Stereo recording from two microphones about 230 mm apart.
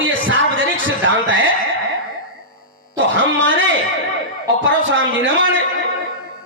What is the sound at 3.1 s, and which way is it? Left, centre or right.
Speech, right.